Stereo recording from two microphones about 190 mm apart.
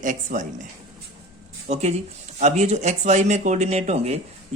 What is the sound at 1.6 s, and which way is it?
Speech, 35° right (ahead or behind).